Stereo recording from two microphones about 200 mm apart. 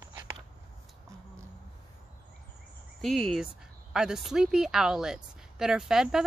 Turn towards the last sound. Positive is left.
turn(degrees=0)  # may be behind; listen again after turning